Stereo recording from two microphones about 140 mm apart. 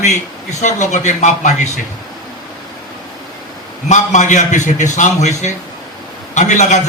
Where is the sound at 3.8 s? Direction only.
60° left (ahead or behind).